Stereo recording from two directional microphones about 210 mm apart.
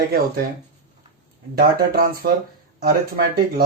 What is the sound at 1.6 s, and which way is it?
Speech, 45° right (ahead or behind).